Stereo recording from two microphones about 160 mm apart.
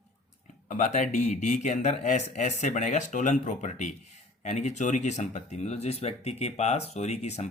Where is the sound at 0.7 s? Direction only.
55° left (ahead or behind).